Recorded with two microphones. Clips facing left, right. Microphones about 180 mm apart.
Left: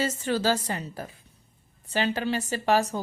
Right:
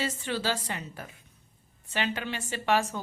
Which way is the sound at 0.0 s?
40° left (ahead or behind).